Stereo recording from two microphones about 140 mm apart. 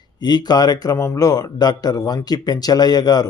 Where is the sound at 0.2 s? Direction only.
30° left (ahead or behind).